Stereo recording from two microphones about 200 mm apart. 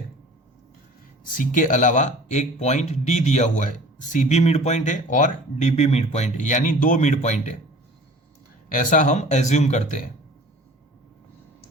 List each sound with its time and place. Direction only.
1.2 s speech: 40° left (ahead or behind)
8.7 s speech: 40° left (ahead or behind)